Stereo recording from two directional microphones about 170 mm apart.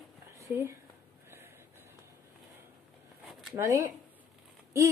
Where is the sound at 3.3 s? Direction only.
Centre (ahead or behind).